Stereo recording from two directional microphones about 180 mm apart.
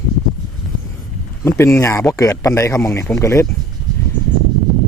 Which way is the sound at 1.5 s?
15° left (ahead or behind).